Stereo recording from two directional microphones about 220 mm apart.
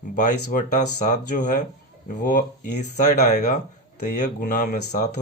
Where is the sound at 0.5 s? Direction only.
40° left (ahead or behind).